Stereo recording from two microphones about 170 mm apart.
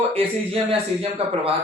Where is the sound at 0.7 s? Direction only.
35° right (ahead or behind).